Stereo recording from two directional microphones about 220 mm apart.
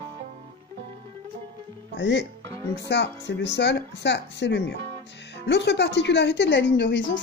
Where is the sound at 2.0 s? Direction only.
55° left (ahead or behind).